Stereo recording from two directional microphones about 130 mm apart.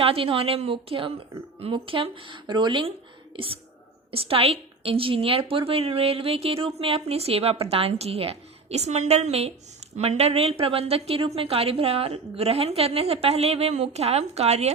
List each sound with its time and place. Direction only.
0.0 s a woman's voice: 45° right (ahead or behind)